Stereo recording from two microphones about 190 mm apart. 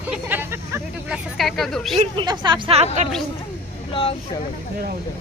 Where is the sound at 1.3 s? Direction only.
Centre (ahead or behind).